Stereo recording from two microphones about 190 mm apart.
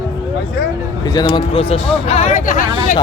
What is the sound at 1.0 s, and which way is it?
Speech, 20° left (ahead or behind).